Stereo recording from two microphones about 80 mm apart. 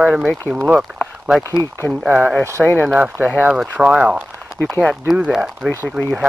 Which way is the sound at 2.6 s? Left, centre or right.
Centre.